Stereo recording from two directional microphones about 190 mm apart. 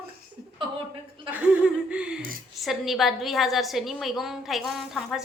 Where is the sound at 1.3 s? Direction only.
5° right (ahead or behind).